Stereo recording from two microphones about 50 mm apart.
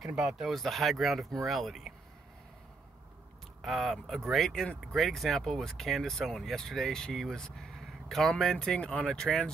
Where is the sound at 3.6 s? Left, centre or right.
Centre.